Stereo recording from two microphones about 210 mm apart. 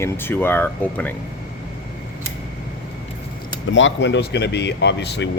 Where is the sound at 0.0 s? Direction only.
10° left (ahead or behind).